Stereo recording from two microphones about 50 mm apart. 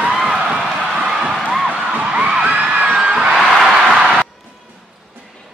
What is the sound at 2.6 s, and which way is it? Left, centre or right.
Music, right.